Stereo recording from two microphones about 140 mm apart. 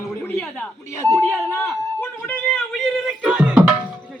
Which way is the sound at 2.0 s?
15° left (ahead or behind).